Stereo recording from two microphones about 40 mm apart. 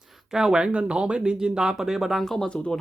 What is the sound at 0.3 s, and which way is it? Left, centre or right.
Speech, centre.